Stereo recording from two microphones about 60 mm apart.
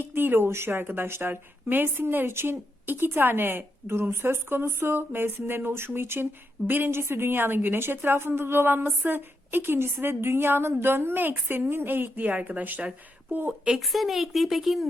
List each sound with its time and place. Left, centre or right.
0.0 s a woman's voice: right
13.7 s a woman's voice: centre